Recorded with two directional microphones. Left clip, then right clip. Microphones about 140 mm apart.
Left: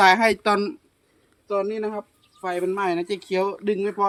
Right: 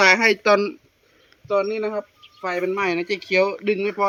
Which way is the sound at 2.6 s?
15° left (ahead or behind).